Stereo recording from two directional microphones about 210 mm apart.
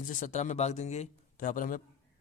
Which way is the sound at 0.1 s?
35° left (ahead or behind).